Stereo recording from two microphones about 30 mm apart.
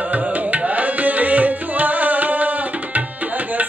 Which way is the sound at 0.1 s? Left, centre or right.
Right.